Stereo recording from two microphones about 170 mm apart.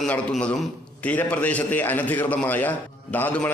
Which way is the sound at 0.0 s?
5° left (ahead or behind).